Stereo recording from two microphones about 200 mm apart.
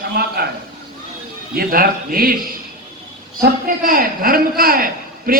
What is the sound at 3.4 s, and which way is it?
A man's voice, 45° right (ahead or behind).